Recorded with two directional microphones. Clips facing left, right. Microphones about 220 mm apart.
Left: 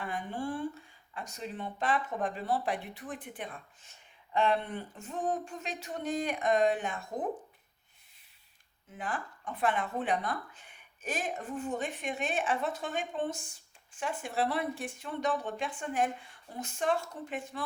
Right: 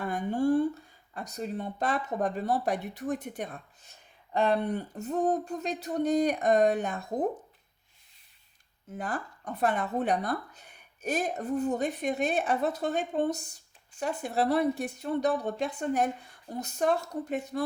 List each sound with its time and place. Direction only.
0.0 s speech: 45° right (ahead or behind)
8.9 s speech: 40° right (ahead or behind)